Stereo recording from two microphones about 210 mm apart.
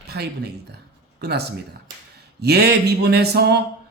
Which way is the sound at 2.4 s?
50° right (ahead or behind).